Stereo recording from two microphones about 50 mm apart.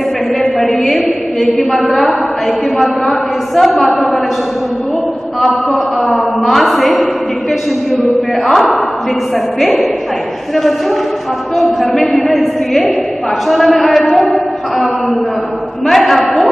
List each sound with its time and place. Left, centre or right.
0.4 s a woman's voice: centre
5.4 s a woman's voice: centre
8.5 s a woman's voice: centre
11.5 s a woman's voice: centre
15.9 s a sound: centre